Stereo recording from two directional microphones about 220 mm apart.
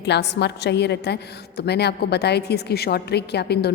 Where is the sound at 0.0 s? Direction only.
50° left (ahead or behind).